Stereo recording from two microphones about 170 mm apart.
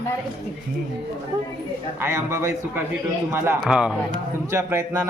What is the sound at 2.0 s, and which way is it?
Speech, 15° right (ahead or behind).